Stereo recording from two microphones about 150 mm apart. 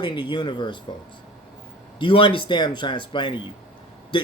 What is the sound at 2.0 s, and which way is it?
Speech, 35° left (ahead or behind).